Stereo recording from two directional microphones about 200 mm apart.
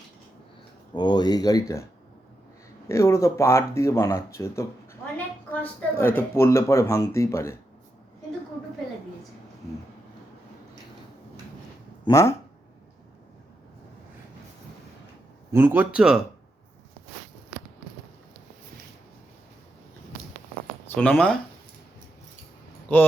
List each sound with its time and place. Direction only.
0.9 s speech: 20° left (ahead or behind)
2.9 s speech: 15° left (ahead or behind)
6.0 s speech: 10° left (ahead or behind)
12.0 s speech: 15° left (ahead or behind)
15.5 s speech: 10° right (ahead or behind)
20.9 s speech: 5° left (ahead or behind)
22.9 s speech: 10° left (ahead or behind)